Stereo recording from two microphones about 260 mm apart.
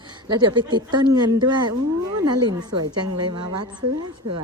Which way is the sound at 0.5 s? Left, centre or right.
Centre.